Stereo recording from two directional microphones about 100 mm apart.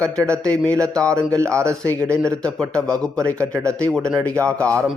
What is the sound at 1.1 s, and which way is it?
Speech, 30° right (ahead or behind).